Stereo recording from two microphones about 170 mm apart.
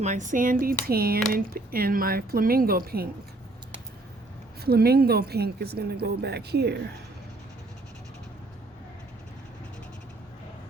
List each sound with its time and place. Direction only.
0.0 s speech: 45° right (ahead or behind); by 3.1 s 65° right (ahead or behind)
4.6 s speech: 65° right (ahead or behind)